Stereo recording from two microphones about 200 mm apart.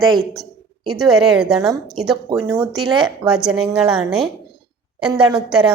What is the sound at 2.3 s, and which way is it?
Speech, 20° right (ahead or behind).